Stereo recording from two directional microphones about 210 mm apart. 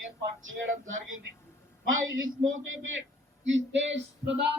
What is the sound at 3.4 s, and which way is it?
Music, 60° right (ahead or behind).